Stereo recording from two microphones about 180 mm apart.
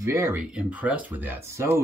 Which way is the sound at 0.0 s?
15° right (ahead or behind).